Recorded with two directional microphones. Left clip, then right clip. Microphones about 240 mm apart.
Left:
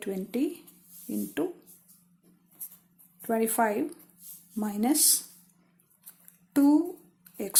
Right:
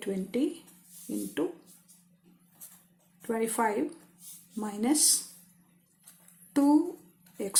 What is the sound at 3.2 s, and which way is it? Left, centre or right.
Speech, left.